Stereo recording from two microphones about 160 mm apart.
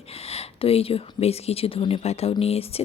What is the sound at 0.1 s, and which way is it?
Speech, 40° left (ahead or behind).